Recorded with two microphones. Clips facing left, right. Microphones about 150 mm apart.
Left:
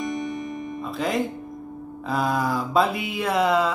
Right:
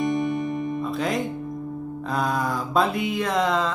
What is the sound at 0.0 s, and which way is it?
Music, 30° right (ahead or behind).